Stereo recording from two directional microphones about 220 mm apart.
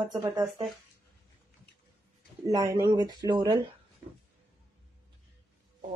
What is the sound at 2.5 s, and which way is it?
Speech, 15° right (ahead or behind).